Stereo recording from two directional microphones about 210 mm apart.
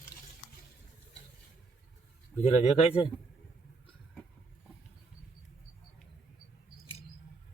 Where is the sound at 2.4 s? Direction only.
30° left (ahead or behind).